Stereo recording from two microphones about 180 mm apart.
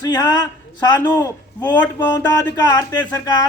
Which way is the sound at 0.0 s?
25° left (ahead or behind).